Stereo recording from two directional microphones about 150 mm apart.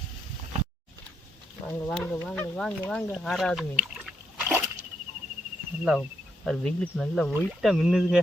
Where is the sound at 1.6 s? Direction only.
15° left (ahead or behind).